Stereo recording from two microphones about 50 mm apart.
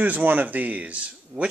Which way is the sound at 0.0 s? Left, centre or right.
Right.